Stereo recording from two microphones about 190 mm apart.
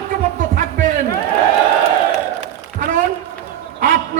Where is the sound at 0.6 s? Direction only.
45° right (ahead or behind).